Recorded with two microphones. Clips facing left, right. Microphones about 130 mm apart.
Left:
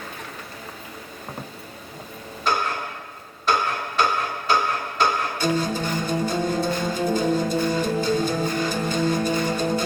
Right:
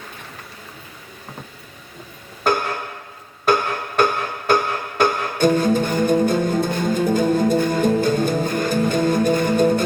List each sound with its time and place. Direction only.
2.5 s tick-tock: 55° right (ahead or behind)
3.4 s music: 55° right (ahead or behind)